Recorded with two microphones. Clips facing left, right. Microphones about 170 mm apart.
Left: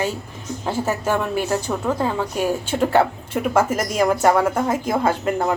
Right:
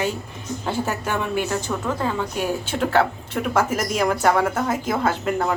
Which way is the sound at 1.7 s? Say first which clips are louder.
Left 2 dB; 20° left (ahead or behind).